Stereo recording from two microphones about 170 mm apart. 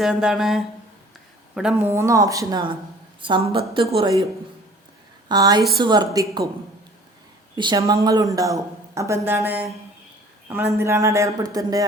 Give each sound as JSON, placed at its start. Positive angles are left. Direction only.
{"t": 0.0, "sound": "a woman's voice", "side_deg": -5}
{"t": 5.3, "sound": "speech", "side_deg": -25}
{"t": 7.5, "sound": "a man's voice", "side_deg": -25}